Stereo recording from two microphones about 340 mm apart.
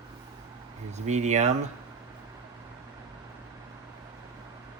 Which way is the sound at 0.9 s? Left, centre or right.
Centre.